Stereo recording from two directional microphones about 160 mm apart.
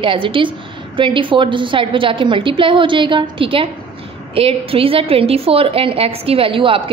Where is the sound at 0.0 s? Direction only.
35° right (ahead or behind).